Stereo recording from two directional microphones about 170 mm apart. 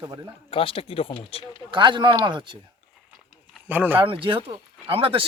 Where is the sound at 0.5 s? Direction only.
30° left (ahead or behind).